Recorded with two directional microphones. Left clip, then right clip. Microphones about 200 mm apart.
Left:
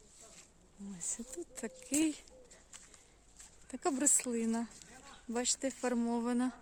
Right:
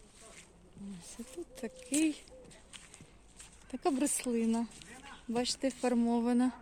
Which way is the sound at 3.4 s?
5° left (ahead or behind).